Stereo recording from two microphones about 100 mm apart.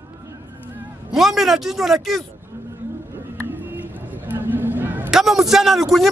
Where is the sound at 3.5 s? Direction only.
20° right (ahead or behind).